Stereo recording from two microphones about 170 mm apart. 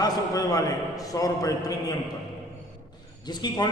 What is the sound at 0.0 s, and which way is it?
A man's voice, 20° left (ahead or behind).